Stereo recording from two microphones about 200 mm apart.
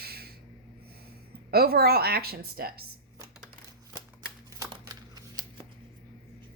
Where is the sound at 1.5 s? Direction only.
50° right (ahead or behind).